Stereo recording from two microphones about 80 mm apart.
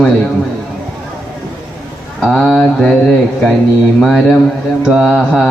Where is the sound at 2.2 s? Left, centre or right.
Centre.